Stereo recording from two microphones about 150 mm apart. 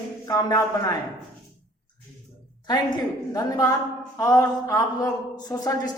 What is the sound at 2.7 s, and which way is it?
A man's voice, 25° left (ahead or behind).